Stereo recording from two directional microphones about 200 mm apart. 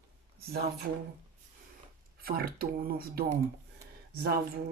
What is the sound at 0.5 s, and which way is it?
Speech, 50° right (ahead or behind).